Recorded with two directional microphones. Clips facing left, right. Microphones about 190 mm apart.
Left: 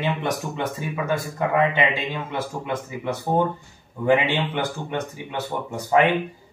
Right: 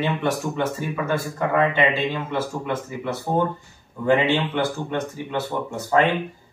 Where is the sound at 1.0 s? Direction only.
15° left (ahead or behind).